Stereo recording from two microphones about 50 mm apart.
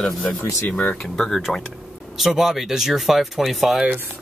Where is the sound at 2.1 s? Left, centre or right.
Centre.